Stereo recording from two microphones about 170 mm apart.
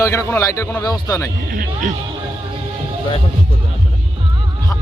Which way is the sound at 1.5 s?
55° right (ahead or behind).